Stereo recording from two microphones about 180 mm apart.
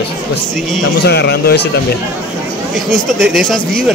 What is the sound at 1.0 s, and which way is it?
Speech, 65° left (ahead or behind).